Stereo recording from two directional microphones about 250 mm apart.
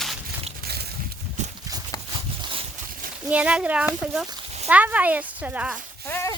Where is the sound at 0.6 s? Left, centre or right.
Right.